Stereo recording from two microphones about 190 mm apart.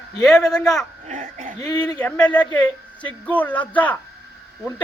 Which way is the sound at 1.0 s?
40° right (ahead or behind).